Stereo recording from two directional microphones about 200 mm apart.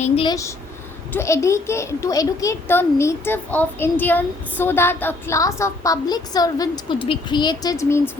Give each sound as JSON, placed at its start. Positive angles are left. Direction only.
{"t": 0.0, "sound": "a woman's voice", "side_deg": 25}
{"t": 1.1, "sound": "a child's voice", "side_deg": 15}